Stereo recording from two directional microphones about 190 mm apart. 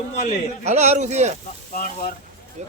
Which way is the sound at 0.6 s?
35° right (ahead or behind).